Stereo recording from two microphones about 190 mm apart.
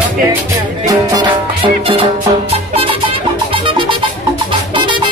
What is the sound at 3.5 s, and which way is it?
Music, 25° right (ahead or behind).